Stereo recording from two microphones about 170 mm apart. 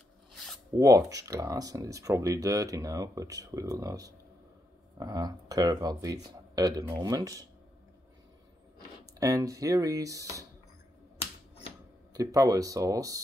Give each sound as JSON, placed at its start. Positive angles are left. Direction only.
{"t": 0.3, "sound": "a sound", "side_deg": 0}
{"t": 0.7, "sound": "speech", "side_deg": -20}
{"t": 9.2, "sound": "speech", "side_deg": -20}
{"t": 12.1, "sound": "speech", "side_deg": -20}